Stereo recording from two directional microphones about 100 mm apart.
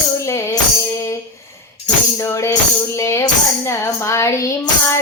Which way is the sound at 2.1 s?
30° left (ahead or behind).